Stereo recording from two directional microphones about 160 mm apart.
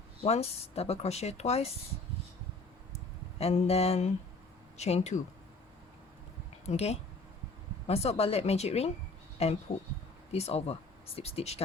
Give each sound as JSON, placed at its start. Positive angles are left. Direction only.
{"t": 0.2, "sound": "speech", "side_deg": 40}
{"t": 3.3, "sound": "speech", "side_deg": 40}
{"t": 6.7, "sound": "speech", "side_deg": 40}